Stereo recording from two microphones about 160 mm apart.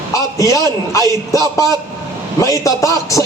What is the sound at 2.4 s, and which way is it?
Speech, 20° left (ahead or behind).